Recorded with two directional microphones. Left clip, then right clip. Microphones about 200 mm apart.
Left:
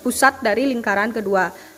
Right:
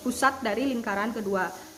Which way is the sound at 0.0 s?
25° left (ahead or behind).